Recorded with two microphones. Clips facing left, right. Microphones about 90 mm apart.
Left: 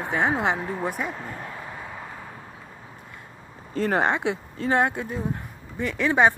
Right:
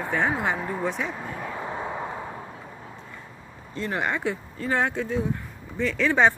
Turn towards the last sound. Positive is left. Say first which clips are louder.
# left 1 dB
turn(degrees=15)  # may be behind; listen again after turning